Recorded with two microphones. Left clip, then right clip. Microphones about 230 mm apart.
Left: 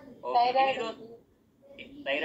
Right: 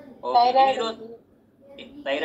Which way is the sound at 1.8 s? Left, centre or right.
Right.